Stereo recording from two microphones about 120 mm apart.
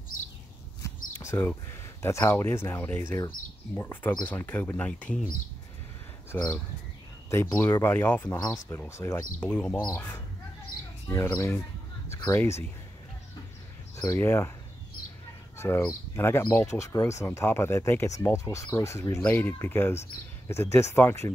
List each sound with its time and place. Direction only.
0.8 s a sound: 20° left (ahead or behind)
2.0 s speech: 25° left (ahead or behind)
6.3 s speech: 20° left (ahead or behind)
8.3 s speech: 25° left (ahead or behind)
14.0 s speech: 20° left (ahead or behind)
15.5 s speech: 20° left (ahead or behind)